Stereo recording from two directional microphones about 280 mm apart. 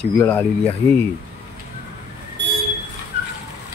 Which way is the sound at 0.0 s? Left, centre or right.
Centre.